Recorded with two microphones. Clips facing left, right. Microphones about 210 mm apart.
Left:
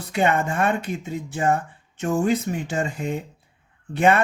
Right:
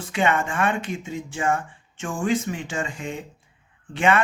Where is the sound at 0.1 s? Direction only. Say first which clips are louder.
Left 2 dB; 40° left (ahead or behind).